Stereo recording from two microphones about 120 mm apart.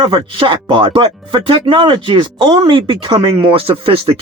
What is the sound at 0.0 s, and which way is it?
Speech, 45° right (ahead or behind).